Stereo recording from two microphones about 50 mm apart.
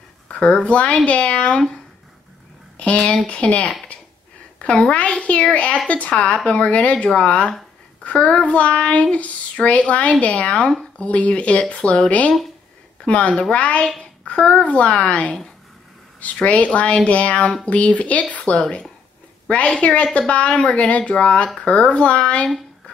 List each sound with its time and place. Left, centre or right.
0.3 s a sound: left
0.7 s child singing: left
2.8 s child singing: left
16.3 s child singing: left